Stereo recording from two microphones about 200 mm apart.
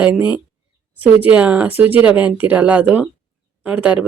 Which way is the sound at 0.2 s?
25° left (ahead or behind).